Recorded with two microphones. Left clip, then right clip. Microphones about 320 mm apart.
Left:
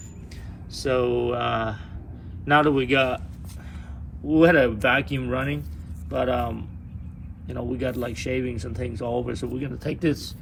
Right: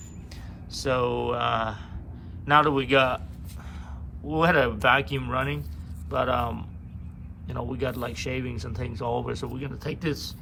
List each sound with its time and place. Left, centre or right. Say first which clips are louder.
0.7 s speech: left 2 dB; centre
4.3 s speech: left 5 dB; centre
7.7 s speech: left 3 dB; centre